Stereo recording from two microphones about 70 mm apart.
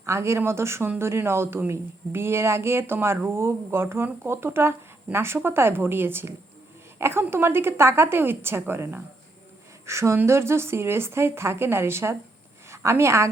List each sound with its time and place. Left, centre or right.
0.0 s speech: right
9.8 s a woman's voice: right